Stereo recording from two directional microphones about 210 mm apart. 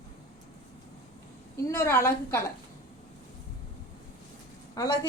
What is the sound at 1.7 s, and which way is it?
Speech, 10° left (ahead or behind).